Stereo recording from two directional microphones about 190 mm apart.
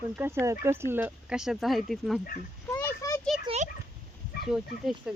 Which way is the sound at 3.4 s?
35° right (ahead or behind).